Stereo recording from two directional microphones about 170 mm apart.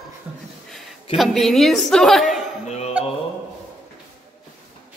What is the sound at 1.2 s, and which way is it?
A woman's voice, centre (ahead or behind).